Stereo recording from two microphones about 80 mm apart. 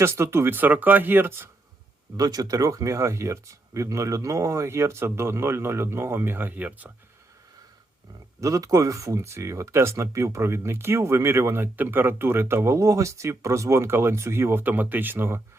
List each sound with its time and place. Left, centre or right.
0.0 s speech: right
2.1 s speech: right; by 6.9 s centre
8.4 s speech: right